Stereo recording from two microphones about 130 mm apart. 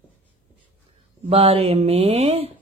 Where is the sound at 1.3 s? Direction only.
50° right (ahead or behind).